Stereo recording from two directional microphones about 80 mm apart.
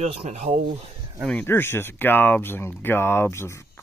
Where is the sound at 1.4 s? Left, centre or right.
Left.